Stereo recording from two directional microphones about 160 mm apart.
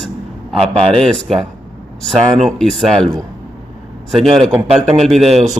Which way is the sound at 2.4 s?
Centre (ahead or behind).